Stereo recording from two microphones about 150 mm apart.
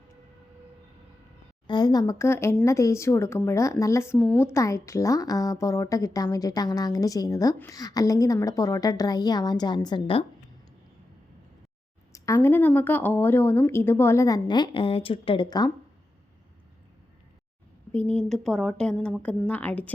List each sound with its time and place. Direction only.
1.6 s a woman's voice: 30° left (ahead or behind)
12.1 s speech: 20° left (ahead or behind)
17.9 s a woman's voice: 10° left (ahead or behind)